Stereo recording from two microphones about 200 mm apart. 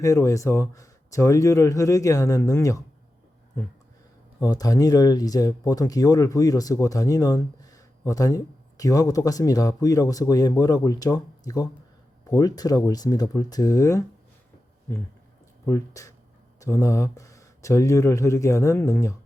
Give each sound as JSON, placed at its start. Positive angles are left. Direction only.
{"t": 0.0, "sound": "speech", "side_deg": 15}
{"t": 4.4, "sound": "speech", "side_deg": 15}
{"t": 15.6, "sound": "speech", "side_deg": 15}